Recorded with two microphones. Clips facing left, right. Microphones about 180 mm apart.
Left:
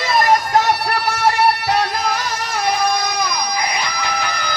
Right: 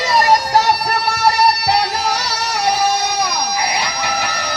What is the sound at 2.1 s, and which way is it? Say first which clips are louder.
Music: right 1 dB; 85° right.